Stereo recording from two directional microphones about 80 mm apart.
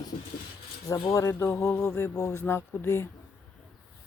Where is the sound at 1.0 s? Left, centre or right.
Left.